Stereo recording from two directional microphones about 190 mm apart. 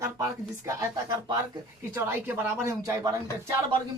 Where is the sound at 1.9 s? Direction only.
10° right (ahead or behind).